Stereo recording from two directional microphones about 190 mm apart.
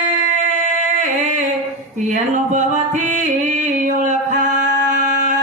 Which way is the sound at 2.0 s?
40° right (ahead or behind).